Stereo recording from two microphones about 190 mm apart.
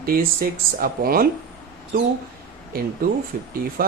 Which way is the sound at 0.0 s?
50° right (ahead or behind).